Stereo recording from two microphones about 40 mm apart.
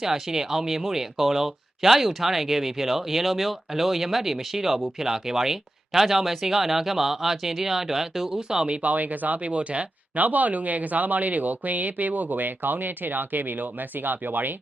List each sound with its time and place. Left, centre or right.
0.0 s speech: centre
8.4 s speech: centre
8.7 s speech: right
10.2 s speech: right